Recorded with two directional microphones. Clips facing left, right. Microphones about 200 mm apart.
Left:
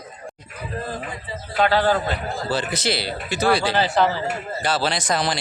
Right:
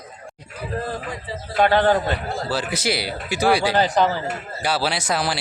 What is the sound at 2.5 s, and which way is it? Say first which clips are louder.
Speech: left 1 dB; 5° right (ahead or behind).